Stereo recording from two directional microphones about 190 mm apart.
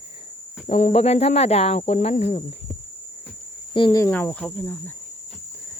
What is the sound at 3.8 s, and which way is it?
Cricket, 20° left (ahead or behind).